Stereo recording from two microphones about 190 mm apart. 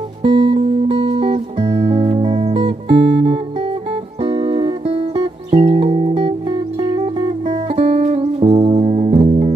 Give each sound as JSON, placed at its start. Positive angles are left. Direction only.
{"t": 0.2, "sound": "music", "side_deg": -25}